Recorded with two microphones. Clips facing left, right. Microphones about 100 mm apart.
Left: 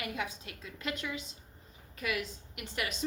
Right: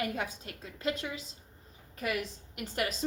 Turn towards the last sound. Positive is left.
turn(degrees=-40)  # may be behind; listen again after turning